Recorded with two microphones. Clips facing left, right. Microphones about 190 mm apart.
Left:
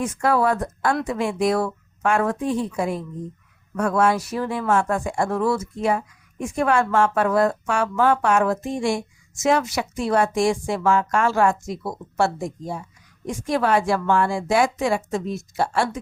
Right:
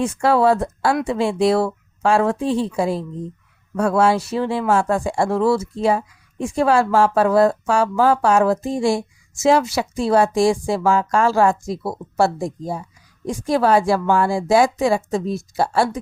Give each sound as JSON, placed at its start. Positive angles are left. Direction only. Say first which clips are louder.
{"t": 0.0, "sound": "speech", "louder": "right 4 dB", "side_deg": -30}